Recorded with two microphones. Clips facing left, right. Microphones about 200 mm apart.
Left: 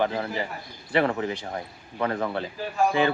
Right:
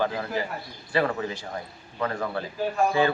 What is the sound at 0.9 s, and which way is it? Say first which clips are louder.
A man's voice: left 2 dB; 20° left (ahead or behind).